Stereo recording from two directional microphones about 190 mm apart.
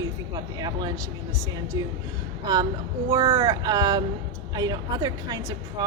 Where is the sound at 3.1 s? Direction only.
20° right (ahead or behind).